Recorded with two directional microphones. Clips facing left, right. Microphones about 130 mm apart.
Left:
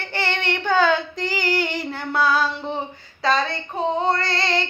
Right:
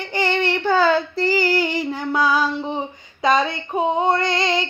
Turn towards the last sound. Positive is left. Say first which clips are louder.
# right 3 dB
turn(degrees=-15)  # may be behind; listen again after turning